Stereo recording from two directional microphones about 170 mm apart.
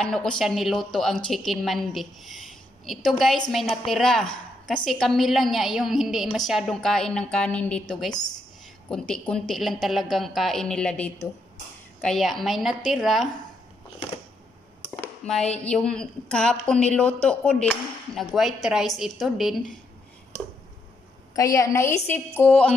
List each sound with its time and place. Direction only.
0.0 s speech: 5° left (ahead or behind)
8.8 s speech: 5° left (ahead or behind)
15.0 s speech: 5° left (ahead or behind)
21.4 s a woman's voice: 20° left (ahead or behind)